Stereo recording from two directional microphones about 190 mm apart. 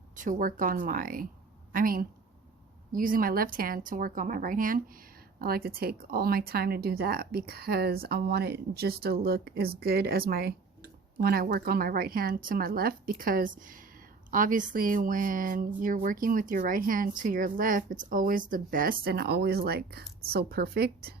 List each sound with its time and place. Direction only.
0.2 s speech: 45° right (ahead or behind)